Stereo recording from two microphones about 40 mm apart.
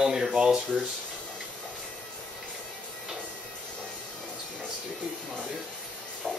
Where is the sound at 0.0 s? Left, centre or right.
Centre.